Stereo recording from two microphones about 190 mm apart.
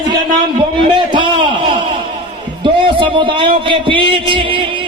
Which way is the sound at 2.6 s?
25° right (ahead or behind).